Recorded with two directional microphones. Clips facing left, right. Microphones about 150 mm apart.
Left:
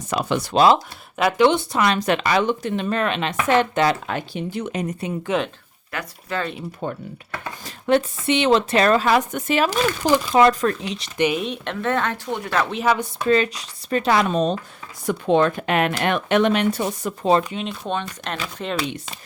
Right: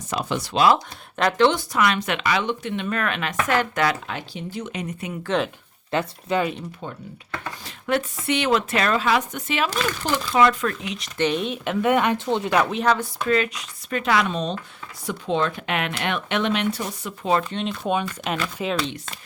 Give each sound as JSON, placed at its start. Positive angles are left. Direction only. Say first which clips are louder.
{"t": 0.1, "sound": "speech", "louder": "left 4 dB", "side_deg": 65}
{"t": 1.2, "sound": "speech", "louder": "left 2 dB", "side_deg": 10}
{"t": 1.5, "sound": "speech", "louder": "left 2 dB", "side_deg": 30}
{"t": 4.0, "sound": "speech", "louder": "left 5 dB", "side_deg": 55}
{"t": 4.7, "sound": "speech", "louder": "left 5 dB", "side_deg": 45}
{"t": 5.3, "sound": "speech", "louder": "even", "side_deg": 10}
{"t": 5.9, "sound": "speech", "louder": "right 5 dB", "side_deg": -25}
{"t": 6.8, "sound": "speech", "louder": "left 8 dB", "side_deg": 50}
{"t": 7.9, "sound": "speech", "louder": "left 5 dB", "side_deg": 25}
{"t": 11.2, "sound": "speech", "louder": "left 1 dB", "side_deg": 5}
{"t": 12.7, "sound": "speech", "louder": "left 1 dB", "side_deg": 10}
{"t": 13.2, "sound": "speech", "louder": "left 4 dB", "side_deg": 30}
{"t": 17.5, "sound": "speech", "louder": "right 1 dB", "side_deg": 5}
{"t": 17.8, "sound": "speech", "louder": "right 5 dB", "side_deg": -10}